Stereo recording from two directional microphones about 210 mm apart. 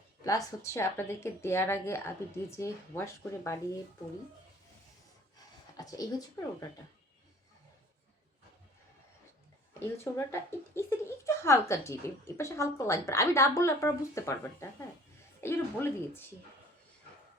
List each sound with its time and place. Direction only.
0.3 s speech: 15° left (ahead or behind)
5.7 s speech: 15° left (ahead or behind)
9.8 s speech: 10° left (ahead or behind)